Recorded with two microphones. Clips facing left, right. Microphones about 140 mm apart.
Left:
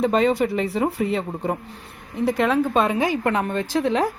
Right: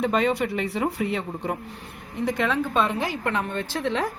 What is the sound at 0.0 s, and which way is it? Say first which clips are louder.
Speech: left 4 dB; centre (ahead or behind).